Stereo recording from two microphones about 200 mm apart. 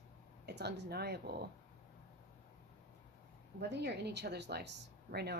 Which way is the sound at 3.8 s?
55° right (ahead or behind).